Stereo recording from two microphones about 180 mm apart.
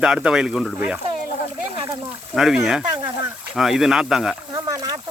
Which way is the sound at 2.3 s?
5° right (ahead or behind).